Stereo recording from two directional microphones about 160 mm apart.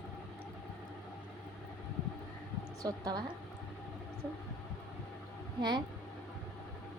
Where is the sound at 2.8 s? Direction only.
25° right (ahead or behind).